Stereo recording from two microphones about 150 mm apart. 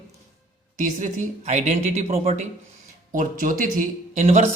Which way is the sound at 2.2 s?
45° right (ahead or behind).